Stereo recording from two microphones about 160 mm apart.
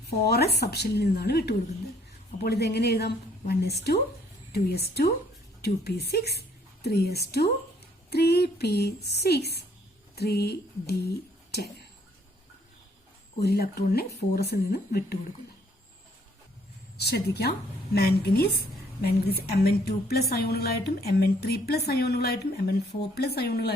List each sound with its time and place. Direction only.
0.3 s a woman's voice: 90° left
13.4 s a woman's voice: 80° left
17.0 s a woman's voice: 85° left